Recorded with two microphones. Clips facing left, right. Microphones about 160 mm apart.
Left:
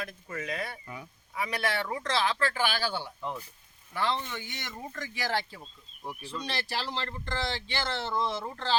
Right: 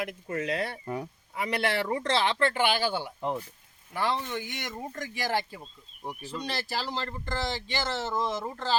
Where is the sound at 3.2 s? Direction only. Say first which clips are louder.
Right 5 dB; 35° right (ahead or behind).